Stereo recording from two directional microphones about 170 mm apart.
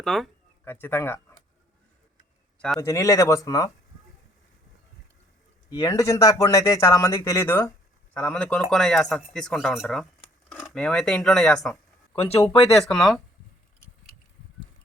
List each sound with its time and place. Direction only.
0.0 s speech: centre (ahead or behind)
0.6 s speech: 15° left (ahead or behind)
2.6 s a man's voice: 5° left (ahead or behind)
2.8 s speech: 20° left (ahead or behind)
5.7 s speech: 20° left (ahead or behind); by 13.2 s centre (ahead or behind)